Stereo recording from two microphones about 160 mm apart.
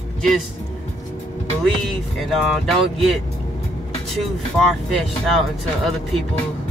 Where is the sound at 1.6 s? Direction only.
Centre (ahead or behind).